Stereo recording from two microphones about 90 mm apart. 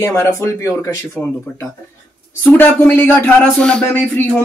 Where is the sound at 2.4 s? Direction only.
20° left (ahead or behind).